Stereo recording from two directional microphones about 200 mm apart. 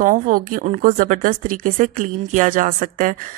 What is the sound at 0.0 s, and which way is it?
Speech, 40° right (ahead or behind).